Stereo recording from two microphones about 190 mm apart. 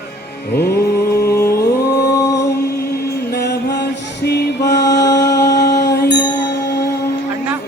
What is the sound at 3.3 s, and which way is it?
Music, 60° left (ahead or behind).